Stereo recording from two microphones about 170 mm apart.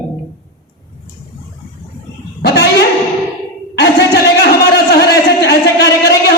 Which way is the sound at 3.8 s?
75° left (ahead or behind).